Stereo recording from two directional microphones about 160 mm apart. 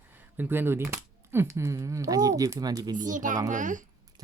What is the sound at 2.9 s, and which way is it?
Speech, 55° right (ahead or behind).